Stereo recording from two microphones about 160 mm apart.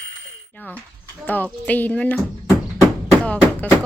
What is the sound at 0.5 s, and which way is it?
Dog, 10° left (ahead or behind).